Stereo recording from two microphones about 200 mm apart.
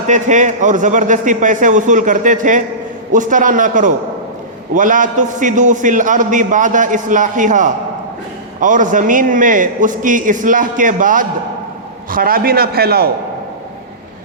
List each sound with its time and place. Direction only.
0.1 s a man's voice: 40° right (ahead or behind)